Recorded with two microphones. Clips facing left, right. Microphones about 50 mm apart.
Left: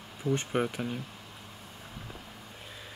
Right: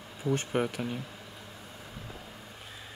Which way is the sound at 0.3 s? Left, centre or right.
Centre.